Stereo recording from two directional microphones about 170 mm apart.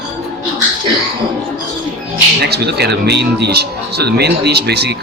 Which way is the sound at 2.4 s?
70° right (ahead or behind).